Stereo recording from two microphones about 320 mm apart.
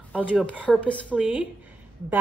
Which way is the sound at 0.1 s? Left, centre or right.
Centre.